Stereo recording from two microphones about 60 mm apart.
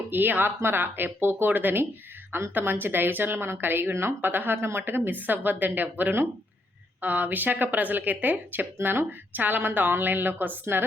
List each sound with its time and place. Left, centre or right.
0.1 s speech: right